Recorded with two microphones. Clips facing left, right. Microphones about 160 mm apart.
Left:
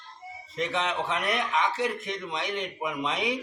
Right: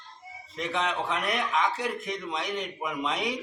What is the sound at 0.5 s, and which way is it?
A man's voice, centre (ahead or behind).